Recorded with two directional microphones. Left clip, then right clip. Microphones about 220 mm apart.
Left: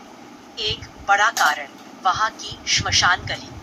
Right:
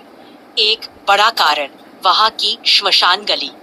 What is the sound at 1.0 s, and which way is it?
A woman's voice, 40° right (ahead or behind).